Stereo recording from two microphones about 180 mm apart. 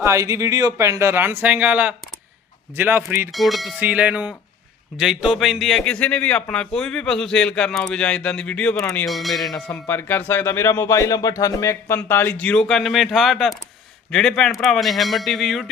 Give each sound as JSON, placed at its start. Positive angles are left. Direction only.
{"t": 0.0, "sound": "speech", "side_deg": -15}
{"t": 3.3, "sound": "a man's voice", "side_deg": 0}
{"t": 9.5, "sound": "a man's voice", "side_deg": 10}